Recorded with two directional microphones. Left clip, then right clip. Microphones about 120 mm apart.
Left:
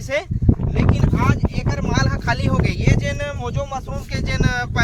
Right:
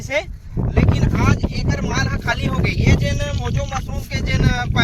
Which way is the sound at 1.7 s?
40° left (ahead or behind).